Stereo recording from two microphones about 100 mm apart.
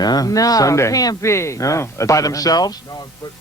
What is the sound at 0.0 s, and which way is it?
A man's voice, 40° left (ahead or behind).